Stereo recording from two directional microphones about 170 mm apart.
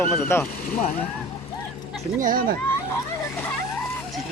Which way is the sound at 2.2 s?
55° right (ahead or behind).